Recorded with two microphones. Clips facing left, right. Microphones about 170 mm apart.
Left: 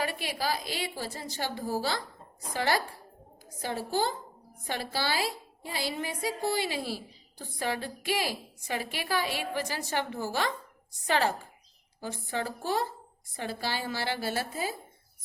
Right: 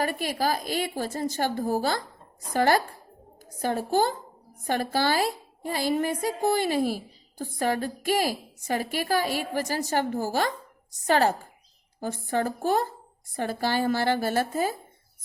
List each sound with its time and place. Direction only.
0.0 s a woman's voice: 45° right (ahead or behind)